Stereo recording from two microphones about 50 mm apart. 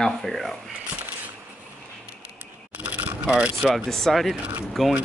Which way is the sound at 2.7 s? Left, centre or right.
Right.